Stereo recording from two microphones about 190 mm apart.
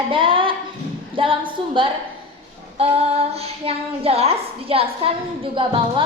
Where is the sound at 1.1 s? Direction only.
25° right (ahead or behind).